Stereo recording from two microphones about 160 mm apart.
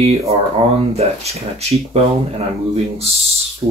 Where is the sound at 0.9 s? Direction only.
40° right (ahead or behind).